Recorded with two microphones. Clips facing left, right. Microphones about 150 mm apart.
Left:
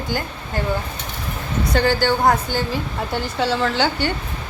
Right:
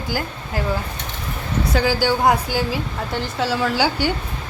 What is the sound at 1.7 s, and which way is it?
Speech, 5° right (ahead or behind).